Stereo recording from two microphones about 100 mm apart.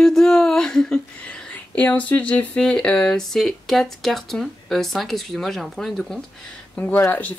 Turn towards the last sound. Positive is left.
turn(degrees=20)  # may be behind; listen again after turning